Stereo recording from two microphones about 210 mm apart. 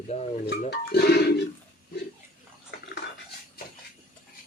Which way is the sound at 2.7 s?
55° left (ahead or behind).